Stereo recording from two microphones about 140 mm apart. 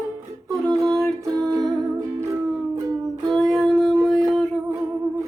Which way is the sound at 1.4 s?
25° right (ahead or behind).